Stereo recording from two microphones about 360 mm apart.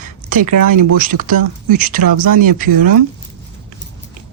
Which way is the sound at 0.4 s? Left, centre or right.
Right.